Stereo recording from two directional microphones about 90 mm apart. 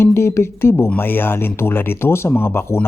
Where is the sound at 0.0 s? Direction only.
30° left (ahead or behind).